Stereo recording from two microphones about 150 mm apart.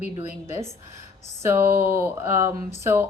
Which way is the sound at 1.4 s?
15° right (ahead or behind).